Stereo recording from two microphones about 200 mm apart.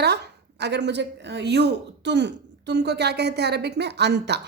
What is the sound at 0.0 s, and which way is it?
Speech, 55° right (ahead or behind).